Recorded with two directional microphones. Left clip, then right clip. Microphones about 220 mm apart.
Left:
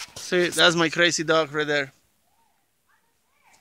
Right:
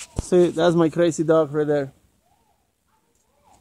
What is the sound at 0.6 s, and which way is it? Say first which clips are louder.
Speech: even; 35° left (ahead or behind).